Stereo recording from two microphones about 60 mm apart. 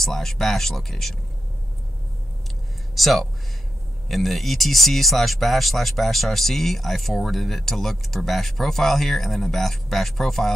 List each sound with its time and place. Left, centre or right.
0.0 s speech: centre
2.9 s speech: centre